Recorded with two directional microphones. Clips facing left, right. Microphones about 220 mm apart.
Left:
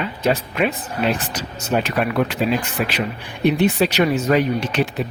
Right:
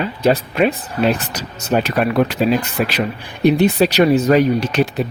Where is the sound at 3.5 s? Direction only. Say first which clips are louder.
Right 4 dB; 40° right (ahead or behind).